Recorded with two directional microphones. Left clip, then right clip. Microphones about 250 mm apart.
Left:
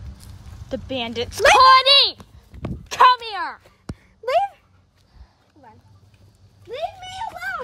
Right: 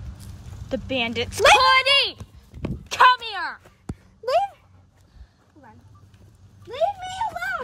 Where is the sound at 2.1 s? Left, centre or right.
Centre.